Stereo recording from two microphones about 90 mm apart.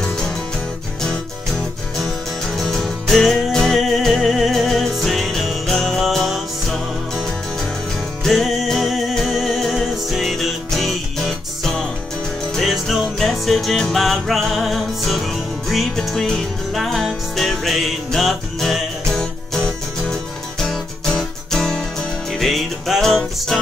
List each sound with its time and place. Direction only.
2.0 s music: 5° left (ahead or behind)